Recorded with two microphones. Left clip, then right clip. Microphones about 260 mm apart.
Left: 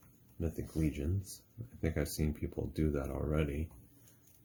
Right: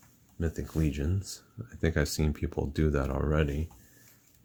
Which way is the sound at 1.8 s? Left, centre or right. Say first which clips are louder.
Right 7 dB; right.